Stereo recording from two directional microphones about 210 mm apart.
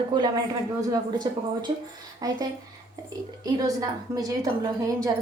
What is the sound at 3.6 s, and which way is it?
A woman's voice, 15° right (ahead or behind).